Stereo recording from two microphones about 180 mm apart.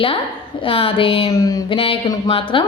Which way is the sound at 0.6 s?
30° left (ahead or behind).